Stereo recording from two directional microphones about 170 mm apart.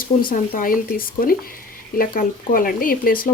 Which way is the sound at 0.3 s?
55° left (ahead or behind).